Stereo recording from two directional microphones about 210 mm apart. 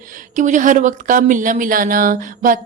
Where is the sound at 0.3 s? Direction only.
35° right (ahead or behind).